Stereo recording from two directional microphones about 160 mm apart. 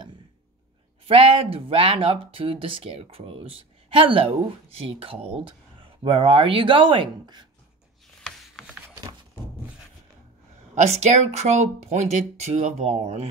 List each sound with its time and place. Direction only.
1.0 s speech: 35° right (ahead or behind)
8.5 s a sound: 5° right (ahead or behind)
10.7 s speech: 45° right (ahead or behind)